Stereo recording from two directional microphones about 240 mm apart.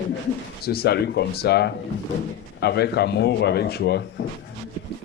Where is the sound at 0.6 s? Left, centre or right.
Left.